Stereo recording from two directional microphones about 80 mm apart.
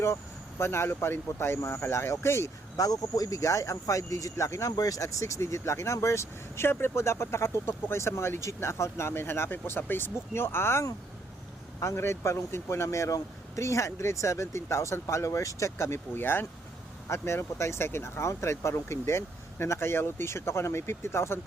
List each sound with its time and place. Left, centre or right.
0.6 s speech: left
2.7 s speech: left